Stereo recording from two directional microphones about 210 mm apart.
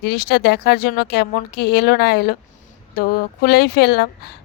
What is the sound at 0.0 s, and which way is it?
Speech, 50° left (ahead or behind).